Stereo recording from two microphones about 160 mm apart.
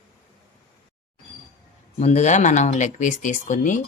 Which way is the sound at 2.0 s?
45° left (ahead or behind).